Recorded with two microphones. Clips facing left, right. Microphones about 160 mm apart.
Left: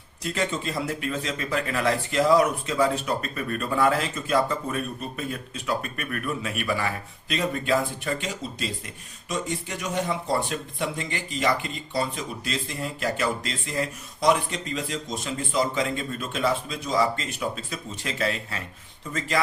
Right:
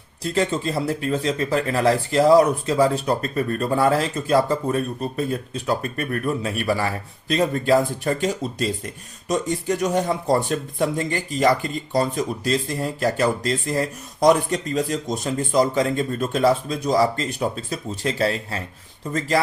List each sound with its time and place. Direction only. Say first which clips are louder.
0.2 s speech: right 6 dB; 35° right (ahead or behind)